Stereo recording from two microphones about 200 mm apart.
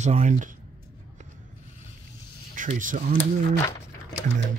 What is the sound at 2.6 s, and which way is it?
Speech, 40° right (ahead or behind).